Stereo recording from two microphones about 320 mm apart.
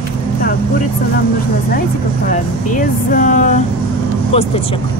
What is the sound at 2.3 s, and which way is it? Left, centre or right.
Speech, left.